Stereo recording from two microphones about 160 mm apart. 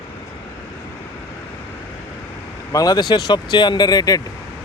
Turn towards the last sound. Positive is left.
turn(degrees=25)  # may be behind; listen again after turning